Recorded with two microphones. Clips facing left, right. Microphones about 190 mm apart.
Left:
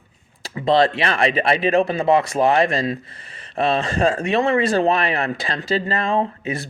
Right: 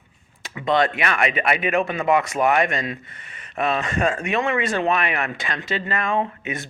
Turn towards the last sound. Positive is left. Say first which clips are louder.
# left 3 dB
turn(degrees=35)  # may be behind; listen again after turning